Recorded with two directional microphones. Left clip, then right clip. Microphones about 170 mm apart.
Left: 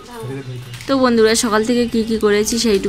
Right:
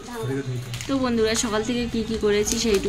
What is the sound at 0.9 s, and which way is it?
A woman's voice, 30° left (ahead or behind).